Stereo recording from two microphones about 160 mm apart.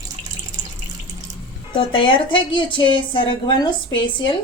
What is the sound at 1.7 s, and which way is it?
A woman's voice, 30° left (ahead or behind).